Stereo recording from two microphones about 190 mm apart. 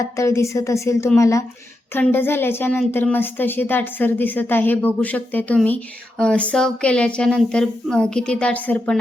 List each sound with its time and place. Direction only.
0.0 s a woman's voice: 15° left (ahead or behind)